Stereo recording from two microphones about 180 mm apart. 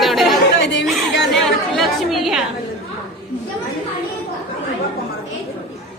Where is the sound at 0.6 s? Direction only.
75° left (ahead or behind).